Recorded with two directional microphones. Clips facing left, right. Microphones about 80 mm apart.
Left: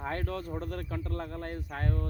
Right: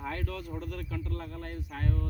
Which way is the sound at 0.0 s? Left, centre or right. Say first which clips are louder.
Left 2 dB; left.